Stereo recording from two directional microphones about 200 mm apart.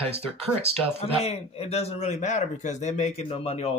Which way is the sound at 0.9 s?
30° left (ahead or behind).